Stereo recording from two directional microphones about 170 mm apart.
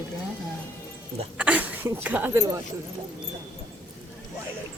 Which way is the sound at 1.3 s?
5° right (ahead or behind).